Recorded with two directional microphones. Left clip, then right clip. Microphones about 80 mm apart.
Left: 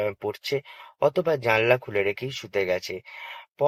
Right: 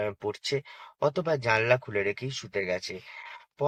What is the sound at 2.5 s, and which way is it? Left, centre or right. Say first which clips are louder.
Speech: left 5 dB; left.